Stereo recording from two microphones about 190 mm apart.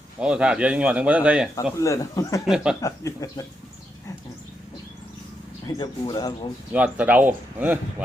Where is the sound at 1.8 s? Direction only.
15° left (ahead or behind).